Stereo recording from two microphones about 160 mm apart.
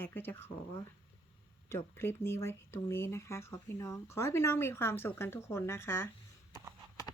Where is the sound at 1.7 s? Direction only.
15° left (ahead or behind).